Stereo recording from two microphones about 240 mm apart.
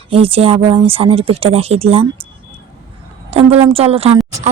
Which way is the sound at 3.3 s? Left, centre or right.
Right.